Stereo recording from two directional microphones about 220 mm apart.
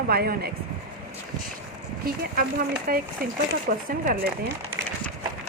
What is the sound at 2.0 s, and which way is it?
A woman's voice, 45° right (ahead or behind).